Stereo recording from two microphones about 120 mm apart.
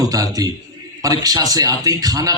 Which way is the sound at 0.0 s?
30° right (ahead or behind).